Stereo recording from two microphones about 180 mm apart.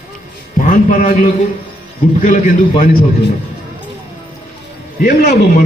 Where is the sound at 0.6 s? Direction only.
45° left (ahead or behind).